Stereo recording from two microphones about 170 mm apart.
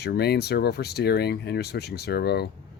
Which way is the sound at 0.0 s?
70° left (ahead or behind).